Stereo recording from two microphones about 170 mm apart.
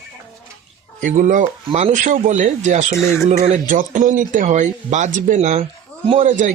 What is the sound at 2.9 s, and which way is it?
Speech, 15° left (ahead or behind).